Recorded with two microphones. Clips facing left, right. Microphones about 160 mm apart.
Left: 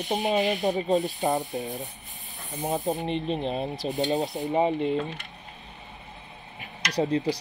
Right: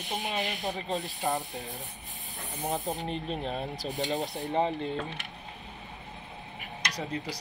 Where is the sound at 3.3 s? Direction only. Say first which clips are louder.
Left 5 dB; 30° left (ahead or behind).